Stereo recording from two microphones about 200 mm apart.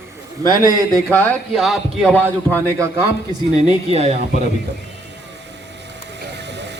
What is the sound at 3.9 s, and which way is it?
Speech, 30° right (ahead or behind).